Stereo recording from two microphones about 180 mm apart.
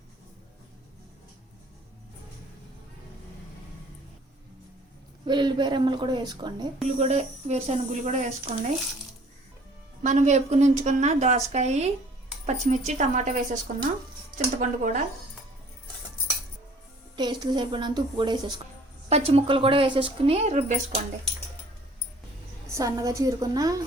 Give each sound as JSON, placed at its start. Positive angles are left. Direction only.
{"t": 5.2, "sound": "a woman's voice", "side_deg": -25}
{"t": 7.0, "sound": "a woman's voice", "side_deg": -40}
{"t": 10.0, "sound": "a woman's voice", "side_deg": -40}
{"t": 13.7, "sound": "a woman's voice", "side_deg": -55}
{"t": 17.2, "sound": "a woman's voice", "side_deg": -25}
{"t": 19.0, "sound": "a woman's voice", "side_deg": -35}
{"t": 22.7, "sound": "a woman's voice", "side_deg": -20}